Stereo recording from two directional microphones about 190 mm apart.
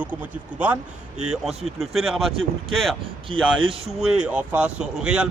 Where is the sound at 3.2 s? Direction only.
25° right (ahead or behind).